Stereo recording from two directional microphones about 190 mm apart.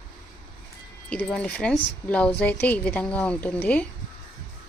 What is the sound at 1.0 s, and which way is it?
A woman's voice, 5° left (ahead or behind).